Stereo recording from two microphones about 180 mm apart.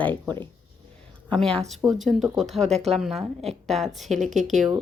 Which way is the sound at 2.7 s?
35° right (ahead or behind).